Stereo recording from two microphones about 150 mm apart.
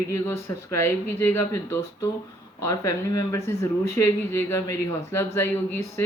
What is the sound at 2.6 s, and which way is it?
Speech, 20° left (ahead or behind).